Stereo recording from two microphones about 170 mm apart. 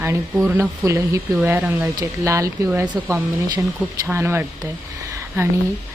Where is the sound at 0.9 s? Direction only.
15° right (ahead or behind).